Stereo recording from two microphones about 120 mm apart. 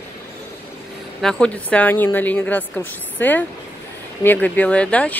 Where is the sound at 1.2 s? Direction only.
5° left (ahead or behind).